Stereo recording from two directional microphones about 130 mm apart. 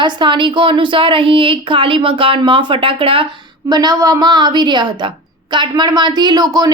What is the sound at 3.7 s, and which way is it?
Speech, 30° right (ahead or behind).